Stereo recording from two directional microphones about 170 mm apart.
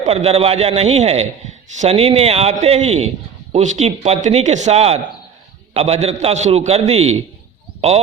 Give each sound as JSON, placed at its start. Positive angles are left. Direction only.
{"t": 0.0, "sound": "speech", "side_deg": -35}